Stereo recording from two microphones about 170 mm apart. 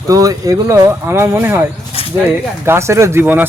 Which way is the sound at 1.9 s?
35° left (ahead or behind).